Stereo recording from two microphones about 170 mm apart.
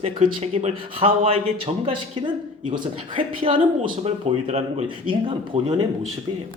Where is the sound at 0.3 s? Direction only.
35° right (ahead or behind).